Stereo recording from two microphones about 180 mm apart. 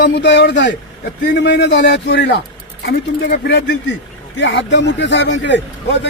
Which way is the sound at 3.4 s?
65° left (ahead or behind).